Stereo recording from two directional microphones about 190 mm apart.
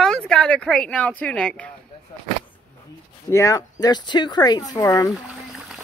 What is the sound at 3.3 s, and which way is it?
A woman's voice, 15° left (ahead or behind).